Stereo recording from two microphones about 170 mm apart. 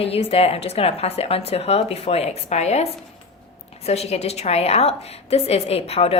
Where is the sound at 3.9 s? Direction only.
40° left (ahead or behind).